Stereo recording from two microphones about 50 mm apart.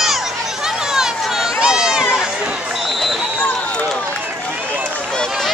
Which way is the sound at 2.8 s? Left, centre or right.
Centre.